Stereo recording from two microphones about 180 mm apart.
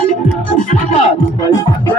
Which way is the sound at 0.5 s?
45° left (ahead or behind).